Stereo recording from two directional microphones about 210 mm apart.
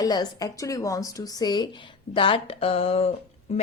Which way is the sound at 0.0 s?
20° left (ahead or behind).